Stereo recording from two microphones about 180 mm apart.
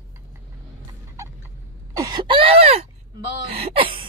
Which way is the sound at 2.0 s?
25° right (ahead or behind).